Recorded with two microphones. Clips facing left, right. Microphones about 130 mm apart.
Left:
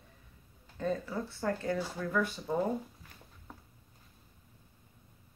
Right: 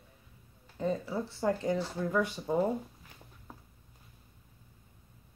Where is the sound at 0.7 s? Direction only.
15° right (ahead or behind).